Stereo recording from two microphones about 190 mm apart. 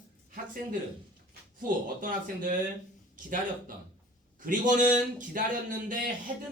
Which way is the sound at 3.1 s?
45° right (ahead or behind).